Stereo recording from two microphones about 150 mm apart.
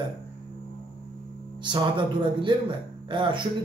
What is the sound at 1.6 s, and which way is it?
A man's voice, 35° right (ahead or behind).